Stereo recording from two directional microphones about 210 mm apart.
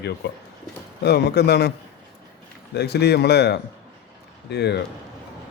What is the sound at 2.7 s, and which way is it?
A man's voice, 50° left (ahead or behind).